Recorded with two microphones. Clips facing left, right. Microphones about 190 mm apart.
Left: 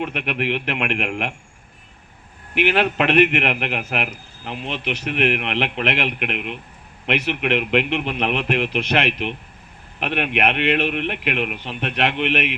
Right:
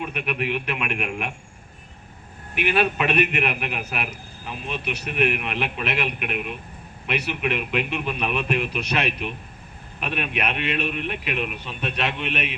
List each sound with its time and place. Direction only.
0.0 s a man's voice: 75° left (ahead or behind)
2.6 s a man's voice: 75° left (ahead or behind)